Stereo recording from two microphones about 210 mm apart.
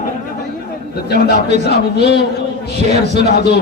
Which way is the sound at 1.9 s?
55° left (ahead or behind).